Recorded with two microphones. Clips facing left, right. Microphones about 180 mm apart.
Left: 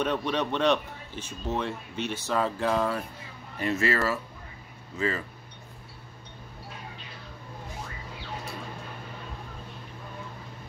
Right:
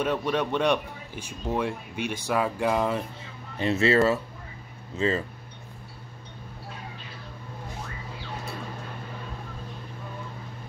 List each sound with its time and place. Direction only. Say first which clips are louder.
0.0 s speech: right 2 dB; 10° right (ahead or behind)
3.5 s speech: right 5 dB; 25° right (ahead or behind)